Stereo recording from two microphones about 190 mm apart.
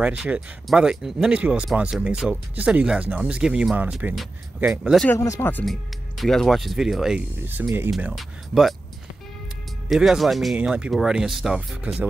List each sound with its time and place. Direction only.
0.0 s speech: 5° right (ahead or behind)
5.0 s speech: 15° left (ahead or behind); by 8.7 s centre (ahead or behind)
9.8 s speech: centre (ahead or behind)